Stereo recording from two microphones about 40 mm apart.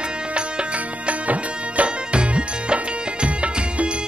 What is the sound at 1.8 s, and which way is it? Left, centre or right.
Music, right.